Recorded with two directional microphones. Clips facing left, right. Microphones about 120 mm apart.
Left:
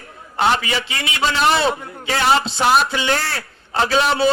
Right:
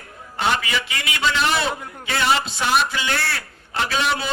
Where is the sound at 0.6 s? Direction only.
30° left (ahead or behind).